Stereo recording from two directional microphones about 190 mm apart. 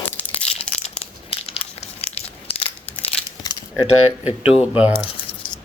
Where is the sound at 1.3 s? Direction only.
30° left (ahead or behind).